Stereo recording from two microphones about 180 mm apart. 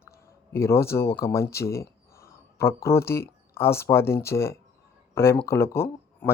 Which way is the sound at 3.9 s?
15° left (ahead or behind).